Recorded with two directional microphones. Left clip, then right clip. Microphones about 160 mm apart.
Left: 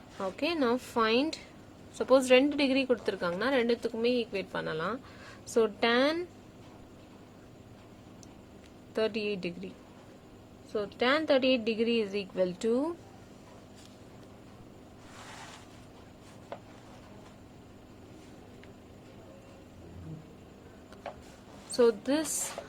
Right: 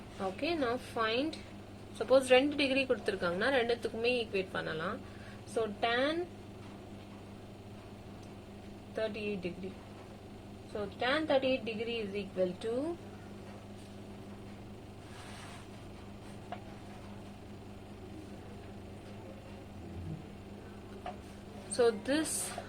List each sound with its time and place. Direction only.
0.2 s a woman's voice: 65° left (ahead or behind)
2.0 s a woman's voice: 55° left (ahead or behind)
5.5 s a woman's voice: 85° left
9.0 s a woman's voice: 90° left
11.0 s a woman's voice: 90° left
21.8 s a woman's voice: 50° left (ahead or behind)